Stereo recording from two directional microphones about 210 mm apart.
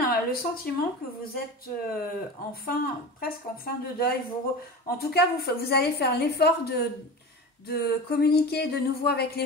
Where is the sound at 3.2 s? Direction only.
45° left (ahead or behind).